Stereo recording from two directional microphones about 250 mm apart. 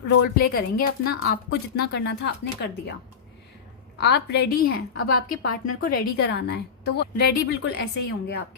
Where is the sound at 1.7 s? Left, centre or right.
Left.